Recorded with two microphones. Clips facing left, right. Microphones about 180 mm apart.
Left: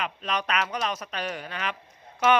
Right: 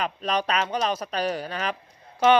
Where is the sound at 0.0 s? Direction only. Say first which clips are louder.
Right 4 dB; 35° right (ahead or behind).